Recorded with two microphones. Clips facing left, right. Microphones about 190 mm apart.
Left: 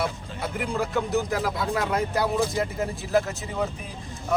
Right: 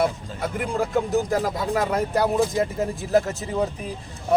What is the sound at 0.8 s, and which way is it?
Speech, 45° right (ahead or behind).